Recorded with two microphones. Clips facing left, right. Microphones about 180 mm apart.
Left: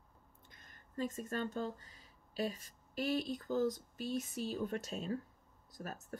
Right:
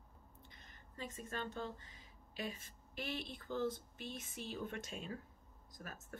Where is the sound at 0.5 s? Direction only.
50° left (ahead or behind).